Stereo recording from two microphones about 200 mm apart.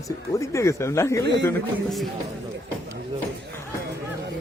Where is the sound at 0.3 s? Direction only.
15° left (ahead or behind).